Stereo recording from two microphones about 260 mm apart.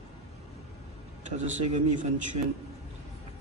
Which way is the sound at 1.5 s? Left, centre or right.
Right.